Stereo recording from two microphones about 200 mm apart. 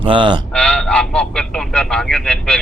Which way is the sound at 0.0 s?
25° right (ahead or behind).